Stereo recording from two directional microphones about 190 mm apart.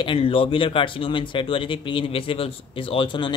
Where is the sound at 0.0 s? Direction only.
30° left (ahead or behind).